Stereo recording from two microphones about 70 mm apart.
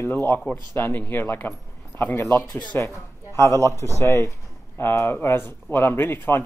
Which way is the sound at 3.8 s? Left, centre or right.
Left.